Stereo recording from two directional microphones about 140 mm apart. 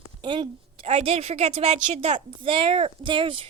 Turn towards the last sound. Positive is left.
turn(degrees=-35)  # may be behind; listen again after turning